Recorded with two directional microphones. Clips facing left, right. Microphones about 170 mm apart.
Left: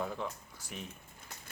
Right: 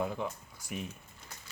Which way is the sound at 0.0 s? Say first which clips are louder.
Right 3 dB; 10° right (ahead or behind).